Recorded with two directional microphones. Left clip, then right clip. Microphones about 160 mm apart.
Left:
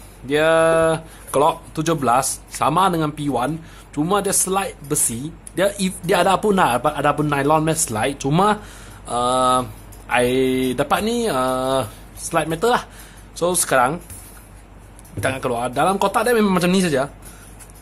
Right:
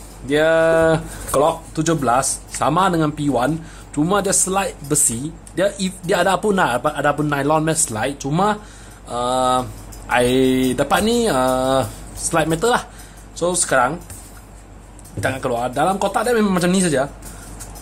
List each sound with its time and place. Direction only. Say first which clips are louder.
0.3 s speech: right 1 dB; 20° left (ahead or behind)
15.1 s speech: right 1 dB; 20° left (ahead or behind)
16.1 s speech: left 1 dB; 25° left (ahead or behind)
16.3 s speech: even; 15° left (ahead or behind)